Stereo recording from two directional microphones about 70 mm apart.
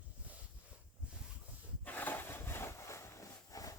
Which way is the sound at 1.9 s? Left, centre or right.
Left.